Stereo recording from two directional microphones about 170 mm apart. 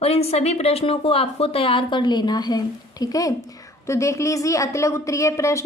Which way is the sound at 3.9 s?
15° left (ahead or behind).